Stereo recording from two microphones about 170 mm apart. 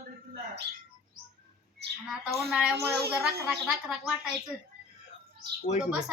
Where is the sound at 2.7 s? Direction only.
70° right (ahead or behind).